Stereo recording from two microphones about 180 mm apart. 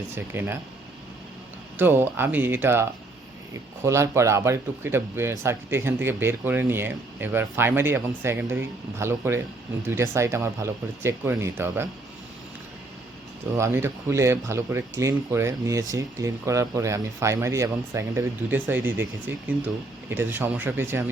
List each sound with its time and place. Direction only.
0.3 s speech: 10° right (ahead or behind)
1.8 s speech: 10° right (ahead or behind)
3.8 s speech: 15° right (ahead or behind)
13.6 s speech: 15° right (ahead or behind)